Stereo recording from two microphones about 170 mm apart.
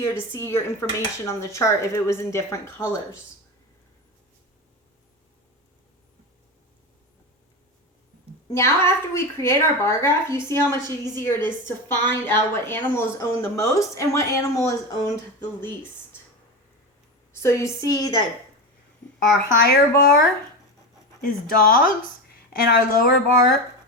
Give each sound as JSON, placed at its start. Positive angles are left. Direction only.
{"t": 0.1, "sound": "a woman's voice", "side_deg": 15}
{"t": 8.4, "sound": "a woman's voice", "side_deg": 15}
{"t": 17.3, "sound": "speech", "side_deg": 15}
{"t": 19.6, "sound": "speech", "side_deg": 65}
{"t": 21.2, "sound": "speech", "side_deg": 55}